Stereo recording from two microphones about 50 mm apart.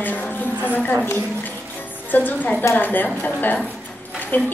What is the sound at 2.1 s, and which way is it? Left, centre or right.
A woman's voice, left.